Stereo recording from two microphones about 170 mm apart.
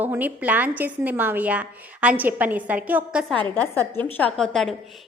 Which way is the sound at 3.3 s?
10° left (ahead or behind).